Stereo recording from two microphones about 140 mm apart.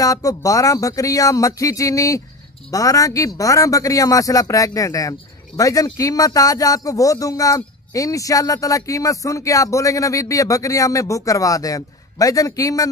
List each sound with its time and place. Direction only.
0.0 s speech: 25° left (ahead or behind)